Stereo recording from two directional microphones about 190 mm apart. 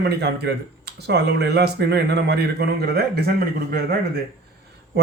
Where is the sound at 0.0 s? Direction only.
60° right (ahead or behind).